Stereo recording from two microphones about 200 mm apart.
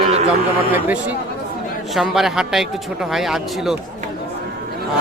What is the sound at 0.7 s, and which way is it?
Speech, 10° right (ahead or behind).